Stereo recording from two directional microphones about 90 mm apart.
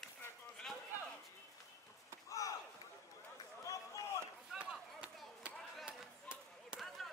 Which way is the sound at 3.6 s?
35° left (ahead or behind).